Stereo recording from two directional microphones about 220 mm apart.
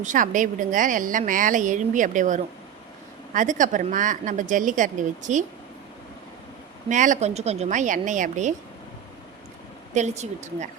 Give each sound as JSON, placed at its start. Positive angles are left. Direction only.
{"t": 0.0, "sound": "a woman's voice", "side_deg": -35}
{"t": 6.8, "sound": "a woman's voice", "side_deg": -35}
{"t": 9.9, "sound": "a woman's voice", "side_deg": -30}